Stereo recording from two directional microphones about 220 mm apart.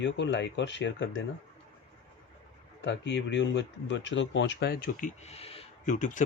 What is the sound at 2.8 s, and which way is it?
Speech, 55° left (ahead or behind).